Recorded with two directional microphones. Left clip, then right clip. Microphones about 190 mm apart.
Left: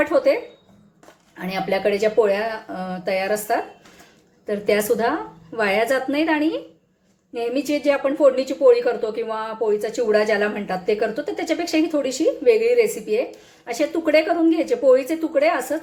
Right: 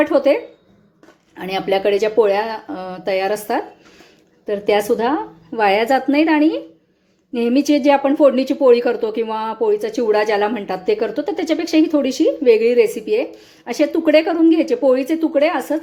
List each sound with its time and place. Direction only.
0.0 s a woman's voice: 35° right (ahead or behind)
1.4 s a woman's voice: 40° right (ahead or behind)